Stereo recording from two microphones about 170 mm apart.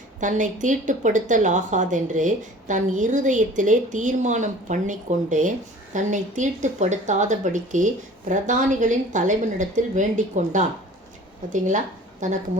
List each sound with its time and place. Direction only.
0.2 s a woman's voice: 45° right (ahead or behind)